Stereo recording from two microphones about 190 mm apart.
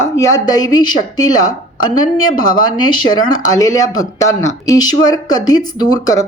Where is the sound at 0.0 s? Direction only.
15° left (ahead or behind).